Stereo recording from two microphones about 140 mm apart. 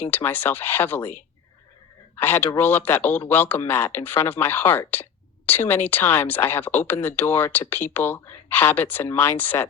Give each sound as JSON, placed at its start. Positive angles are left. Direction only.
{"t": 0.0, "sound": "speech", "side_deg": 15}
{"t": 2.2, "sound": "speech", "side_deg": 15}